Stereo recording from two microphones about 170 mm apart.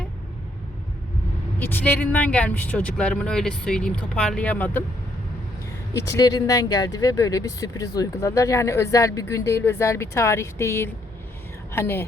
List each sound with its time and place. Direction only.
1.5 s speech: 10° left (ahead or behind)
5.9 s speech: 20° left (ahead or behind)